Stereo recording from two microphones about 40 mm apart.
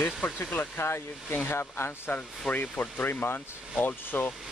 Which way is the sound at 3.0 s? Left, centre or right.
Left.